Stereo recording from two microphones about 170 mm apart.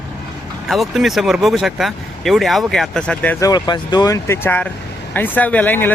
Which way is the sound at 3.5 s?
25° left (ahead or behind).